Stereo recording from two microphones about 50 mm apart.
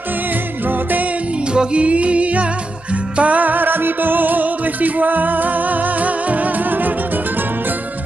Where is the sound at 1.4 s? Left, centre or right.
Centre; by 7.8 s right.